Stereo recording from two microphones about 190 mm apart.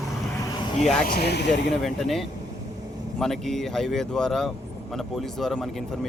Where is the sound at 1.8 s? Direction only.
Centre (ahead or behind).